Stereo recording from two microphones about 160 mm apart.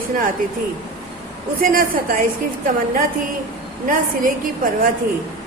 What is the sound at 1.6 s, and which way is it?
A woman's voice, 60° right (ahead or behind).